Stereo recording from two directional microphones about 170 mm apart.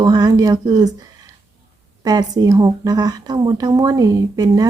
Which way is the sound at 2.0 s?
20° right (ahead or behind).